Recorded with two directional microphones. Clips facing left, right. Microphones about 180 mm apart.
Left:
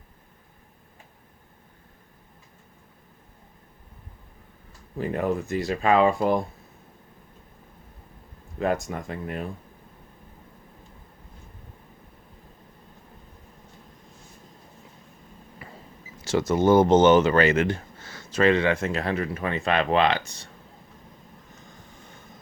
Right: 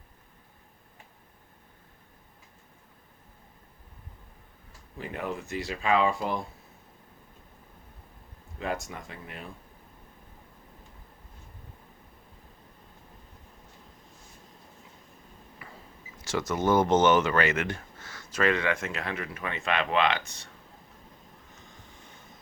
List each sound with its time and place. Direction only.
4.9 s speech: 45° left (ahead or behind)
8.5 s speech: 50° left (ahead or behind)
15.6 s a sound: 25° left (ahead or behind)
16.2 s speech: 30° left (ahead or behind)